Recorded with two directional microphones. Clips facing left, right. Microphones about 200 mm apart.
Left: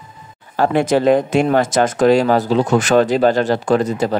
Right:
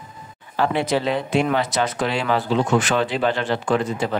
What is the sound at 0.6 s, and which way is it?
Speech, 45° left (ahead or behind).